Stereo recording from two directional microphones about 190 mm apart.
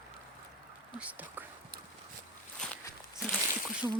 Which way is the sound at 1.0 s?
10° right (ahead or behind).